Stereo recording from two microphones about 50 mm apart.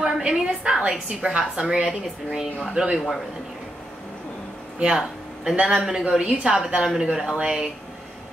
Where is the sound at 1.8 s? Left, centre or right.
Centre.